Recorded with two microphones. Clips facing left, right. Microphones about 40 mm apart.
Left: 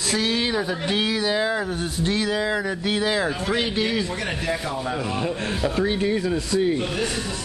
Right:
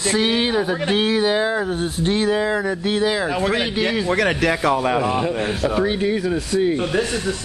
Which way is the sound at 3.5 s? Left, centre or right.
Centre.